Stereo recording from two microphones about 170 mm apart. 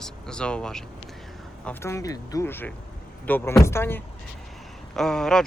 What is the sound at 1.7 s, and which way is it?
Speech, 15° left (ahead or behind).